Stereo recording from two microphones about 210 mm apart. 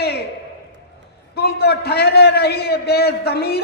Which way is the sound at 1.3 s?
50° left (ahead or behind).